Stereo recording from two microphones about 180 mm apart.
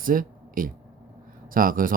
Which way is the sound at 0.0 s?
50° right (ahead or behind).